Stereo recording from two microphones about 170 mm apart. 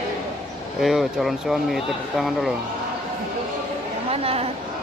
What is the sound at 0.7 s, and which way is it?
Speech, centre (ahead or behind).